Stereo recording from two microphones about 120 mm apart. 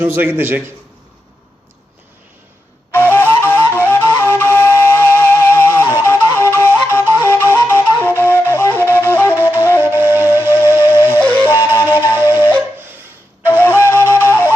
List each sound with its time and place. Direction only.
0.0 s a man's voice: 15° right (ahead or behind)
2.9 s flute: 15° left (ahead or behind)
9.8 s flute: 20° right (ahead or behind)
10.8 s music: 20° right (ahead or behind)
11.2 s music: 10° left (ahead or behind)
11.9 s music: 20° right (ahead or behind)
13.5 s flute: 15° left (ahead or behind)
14.3 s wind instrument: 15° left (ahead or behind)